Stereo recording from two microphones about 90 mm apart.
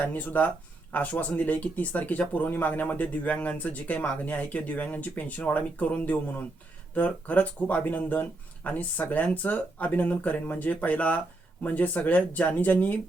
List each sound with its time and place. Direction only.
0.0 s speech: 20° left (ahead or behind)